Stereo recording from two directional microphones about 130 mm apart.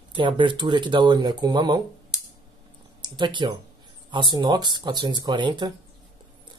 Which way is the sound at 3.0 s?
35° right (ahead or behind).